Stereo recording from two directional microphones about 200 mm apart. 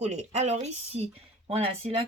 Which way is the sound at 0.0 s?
35° right (ahead or behind).